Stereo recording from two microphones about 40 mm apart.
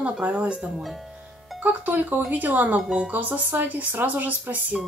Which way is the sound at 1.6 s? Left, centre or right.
Right.